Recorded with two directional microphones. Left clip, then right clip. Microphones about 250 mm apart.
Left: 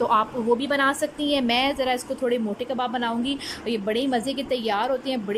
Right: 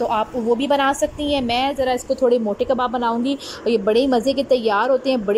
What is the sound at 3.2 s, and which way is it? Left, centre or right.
A woman's voice, centre.